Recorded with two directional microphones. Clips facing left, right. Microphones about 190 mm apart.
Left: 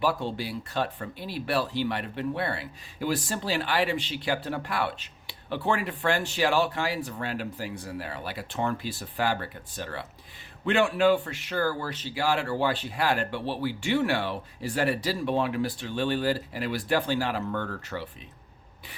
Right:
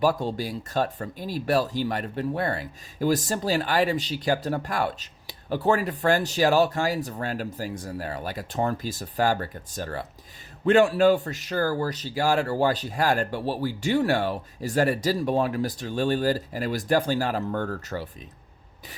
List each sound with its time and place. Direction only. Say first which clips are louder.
0.0 s speech: right 4 dB; 40° right (ahead or behind)